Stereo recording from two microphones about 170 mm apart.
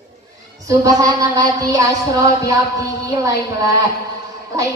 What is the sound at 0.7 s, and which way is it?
A woman's voice, 20° right (ahead or behind).